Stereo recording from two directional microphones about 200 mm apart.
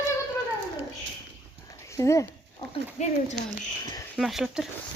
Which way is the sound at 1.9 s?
15° left (ahead or behind).